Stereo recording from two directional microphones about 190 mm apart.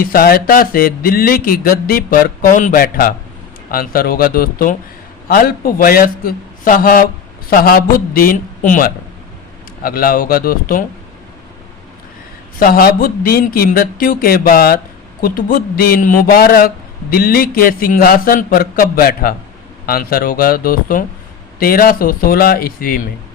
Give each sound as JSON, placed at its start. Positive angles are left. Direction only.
{"t": 0.0, "sound": "a man's voice", "side_deg": 50}
{"t": 12.5, "sound": "a man's voice", "side_deg": 50}